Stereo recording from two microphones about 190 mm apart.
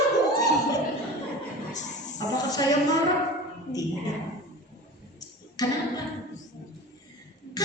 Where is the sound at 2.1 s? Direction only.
20° left (ahead or behind).